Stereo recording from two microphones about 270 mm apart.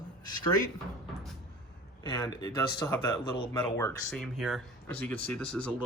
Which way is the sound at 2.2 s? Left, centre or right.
Centre.